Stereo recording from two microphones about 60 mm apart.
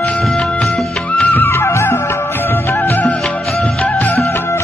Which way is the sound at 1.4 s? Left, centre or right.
Left.